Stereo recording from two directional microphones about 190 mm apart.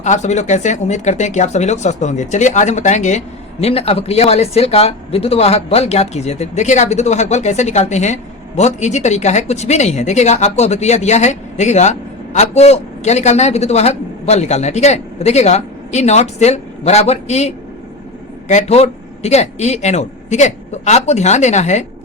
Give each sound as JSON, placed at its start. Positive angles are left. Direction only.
{"t": 0.0, "sound": "speech", "side_deg": 40}